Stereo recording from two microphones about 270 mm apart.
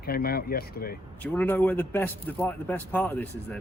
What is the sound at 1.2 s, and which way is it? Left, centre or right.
A man's voice, centre.